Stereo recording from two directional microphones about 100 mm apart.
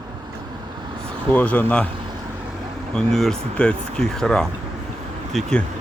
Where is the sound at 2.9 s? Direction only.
5° left (ahead or behind).